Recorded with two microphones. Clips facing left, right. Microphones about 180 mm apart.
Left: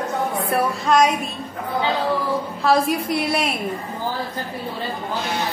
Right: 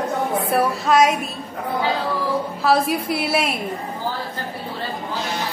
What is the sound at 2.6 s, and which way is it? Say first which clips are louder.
Speech: even; centre (ahead or behind).